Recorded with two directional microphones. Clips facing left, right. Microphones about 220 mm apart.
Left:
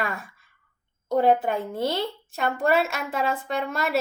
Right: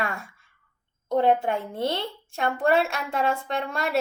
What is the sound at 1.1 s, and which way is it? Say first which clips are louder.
A woman's voice: left 1 dB; 5° left (ahead or behind).